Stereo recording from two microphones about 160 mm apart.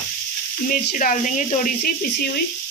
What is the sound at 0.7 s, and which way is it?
Speech, 55° left (ahead or behind).